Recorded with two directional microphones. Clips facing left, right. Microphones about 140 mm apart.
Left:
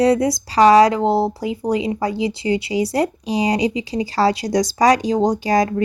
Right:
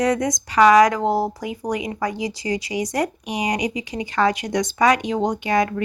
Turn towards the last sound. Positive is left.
turn(degrees=35)  # may be behind; listen again after turning